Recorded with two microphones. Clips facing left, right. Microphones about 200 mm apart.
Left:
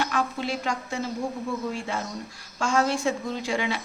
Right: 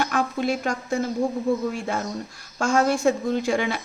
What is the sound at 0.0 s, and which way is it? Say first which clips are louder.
A woman's voice: right 4 dB; 50° right (ahead or behind).